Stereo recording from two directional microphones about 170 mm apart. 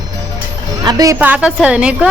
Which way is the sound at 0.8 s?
20° right (ahead or behind).